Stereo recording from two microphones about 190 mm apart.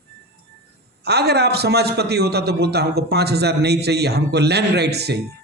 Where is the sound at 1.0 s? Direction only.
60° right (ahead or behind).